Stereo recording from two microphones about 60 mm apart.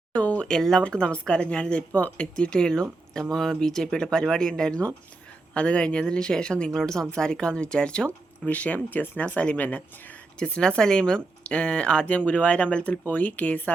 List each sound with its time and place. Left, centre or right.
0.1 s a sound: left
0.9 s speech: centre
8.4 s speech: left